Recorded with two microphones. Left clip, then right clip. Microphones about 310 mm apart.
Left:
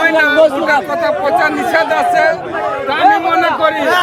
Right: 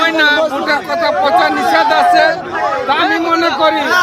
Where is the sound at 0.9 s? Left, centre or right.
Centre.